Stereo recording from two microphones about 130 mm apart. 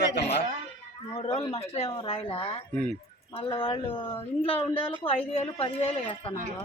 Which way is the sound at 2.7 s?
10° left (ahead or behind).